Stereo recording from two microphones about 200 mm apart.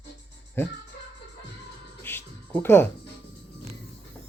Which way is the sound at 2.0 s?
10° left (ahead or behind).